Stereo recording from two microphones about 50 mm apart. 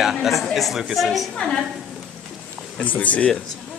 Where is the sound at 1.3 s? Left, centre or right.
Centre.